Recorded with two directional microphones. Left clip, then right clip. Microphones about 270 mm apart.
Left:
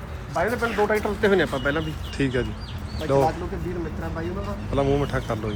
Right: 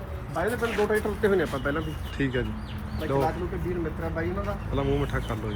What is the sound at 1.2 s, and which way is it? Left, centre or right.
Speech, left.